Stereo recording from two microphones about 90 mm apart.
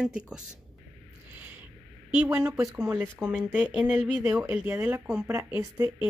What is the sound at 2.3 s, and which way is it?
Speech, 25° right (ahead or behind).